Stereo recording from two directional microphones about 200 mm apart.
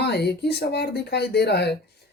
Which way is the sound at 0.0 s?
55° left (ahead or behind).